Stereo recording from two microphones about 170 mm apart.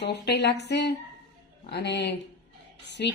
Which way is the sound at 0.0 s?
80° left.